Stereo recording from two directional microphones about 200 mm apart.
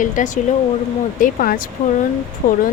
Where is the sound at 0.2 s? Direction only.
40° left (ahead or behind).